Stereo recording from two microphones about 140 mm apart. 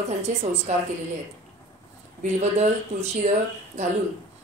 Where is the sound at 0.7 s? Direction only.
60° right (ahead or behind).